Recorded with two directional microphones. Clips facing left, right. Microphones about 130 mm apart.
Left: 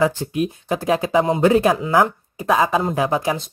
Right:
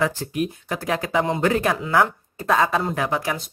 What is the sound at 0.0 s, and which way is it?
Speech, 25° left (ahead or behind).